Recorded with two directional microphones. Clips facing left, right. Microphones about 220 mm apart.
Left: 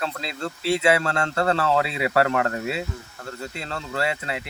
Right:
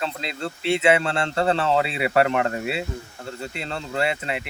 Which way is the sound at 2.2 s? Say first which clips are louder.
Right 1 dB; 5° right (ahead or behind).